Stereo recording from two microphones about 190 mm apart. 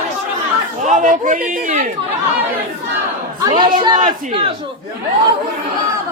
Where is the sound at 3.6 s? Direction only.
25° right (ahead or behind).